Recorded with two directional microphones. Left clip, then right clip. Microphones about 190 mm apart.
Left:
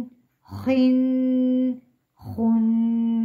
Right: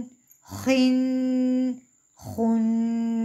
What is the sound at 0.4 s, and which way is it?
Humming, 40° right (ahead or behind).